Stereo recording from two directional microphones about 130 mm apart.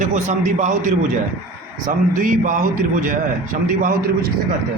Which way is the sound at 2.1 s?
85° right.